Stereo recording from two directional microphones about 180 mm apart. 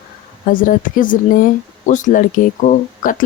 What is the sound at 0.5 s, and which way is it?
Speech, 50° left (ahead or behind).